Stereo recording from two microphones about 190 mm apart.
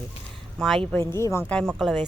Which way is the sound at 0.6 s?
Centre (ahead or behind).